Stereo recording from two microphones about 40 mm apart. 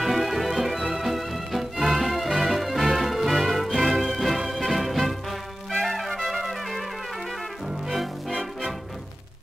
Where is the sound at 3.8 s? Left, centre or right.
Centre.